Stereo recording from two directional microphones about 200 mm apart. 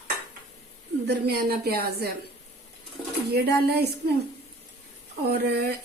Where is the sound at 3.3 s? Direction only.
55° right (ahead or behind).